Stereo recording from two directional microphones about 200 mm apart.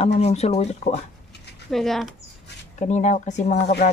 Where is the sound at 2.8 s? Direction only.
35° left (ahead or behind).